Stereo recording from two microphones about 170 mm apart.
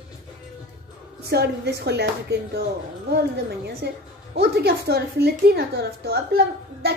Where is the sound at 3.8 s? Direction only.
90° right.